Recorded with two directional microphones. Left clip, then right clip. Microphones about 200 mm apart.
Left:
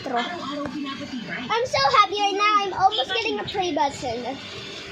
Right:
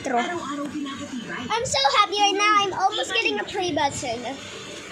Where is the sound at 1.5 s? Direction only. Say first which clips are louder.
Left 1 dB; 25° left (ahead or behind).